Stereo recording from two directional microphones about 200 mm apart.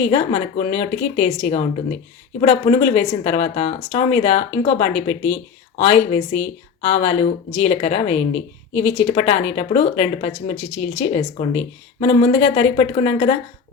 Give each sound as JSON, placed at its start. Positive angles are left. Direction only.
{"t": 0.1, "sound": "speech", "side_deg": 30}